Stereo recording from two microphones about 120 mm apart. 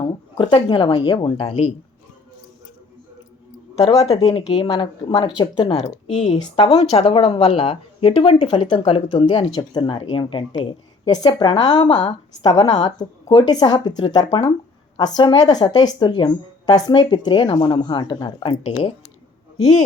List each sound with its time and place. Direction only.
0.3 s speech: 40° left (ahead or behind)
4.0 s speech: 60° left (ahead or behind)
4.6 s speech: 35° left (ahead or behind)
6.1 s speech: 65° left (ahead or behind)